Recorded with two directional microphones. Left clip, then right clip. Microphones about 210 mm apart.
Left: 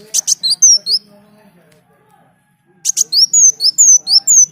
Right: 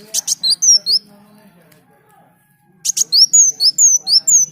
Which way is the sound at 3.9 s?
15° left (ahead or behind).